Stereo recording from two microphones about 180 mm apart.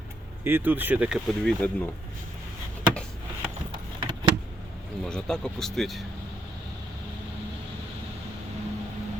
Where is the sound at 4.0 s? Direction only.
25° right (ahead or behind).